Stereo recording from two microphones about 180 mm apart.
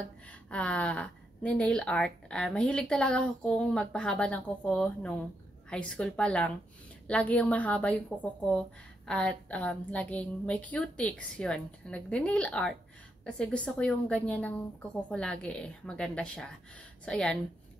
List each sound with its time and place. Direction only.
0.3 s a woman's voice: 5° left (ahead or behind)